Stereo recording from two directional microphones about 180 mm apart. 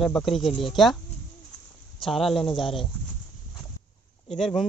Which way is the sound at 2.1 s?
Centre (ahead or behind).